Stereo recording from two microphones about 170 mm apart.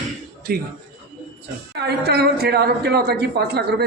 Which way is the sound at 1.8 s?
70° right (ahead or behind).